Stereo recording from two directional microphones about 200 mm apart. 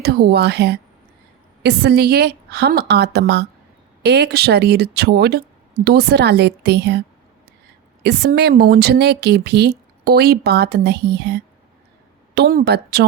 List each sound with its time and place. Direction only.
0.0 s speech: 55° right (ahead or behind)
8.0 s a woman's voice: 55° right (ahead or behind)